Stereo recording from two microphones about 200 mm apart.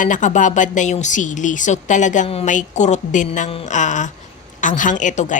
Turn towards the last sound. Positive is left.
turn(degrees=40)  # may be behind; listen again after turning